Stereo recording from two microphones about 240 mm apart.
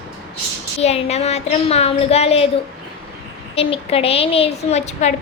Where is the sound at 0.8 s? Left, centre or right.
Left.